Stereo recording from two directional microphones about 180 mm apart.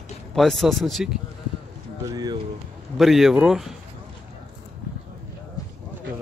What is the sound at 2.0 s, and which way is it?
Speech, 20° right (ahead or behind).